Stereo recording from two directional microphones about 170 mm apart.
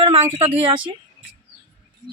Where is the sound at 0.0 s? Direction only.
35° right (ahead or behind).